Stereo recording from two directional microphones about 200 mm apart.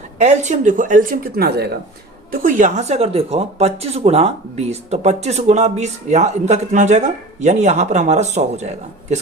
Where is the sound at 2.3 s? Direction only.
40° right (ahead or behind).